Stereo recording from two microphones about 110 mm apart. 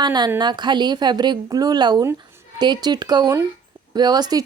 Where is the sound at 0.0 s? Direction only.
40° right (ahead or behind).